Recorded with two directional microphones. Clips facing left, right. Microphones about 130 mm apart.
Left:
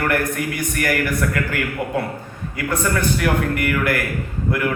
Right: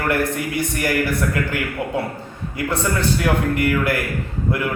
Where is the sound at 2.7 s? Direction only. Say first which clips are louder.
Left 1 dB; 25° right (ahead or behind).